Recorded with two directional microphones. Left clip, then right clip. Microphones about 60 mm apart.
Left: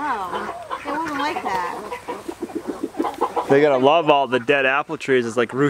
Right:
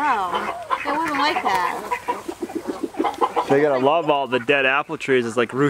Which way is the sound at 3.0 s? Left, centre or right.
Right.